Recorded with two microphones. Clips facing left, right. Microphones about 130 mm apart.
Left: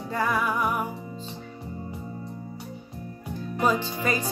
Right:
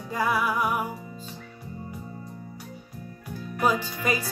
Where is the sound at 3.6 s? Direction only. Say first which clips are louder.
Even; 10° right (ahead or behind).